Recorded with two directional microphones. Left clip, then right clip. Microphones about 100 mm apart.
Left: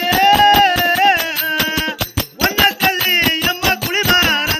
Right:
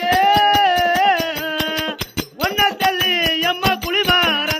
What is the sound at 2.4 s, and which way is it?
Music, 25° right (ahead or behind).